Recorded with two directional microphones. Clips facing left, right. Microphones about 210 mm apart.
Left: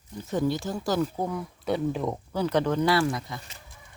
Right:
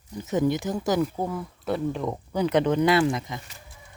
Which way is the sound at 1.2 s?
Centre (ahead or behind).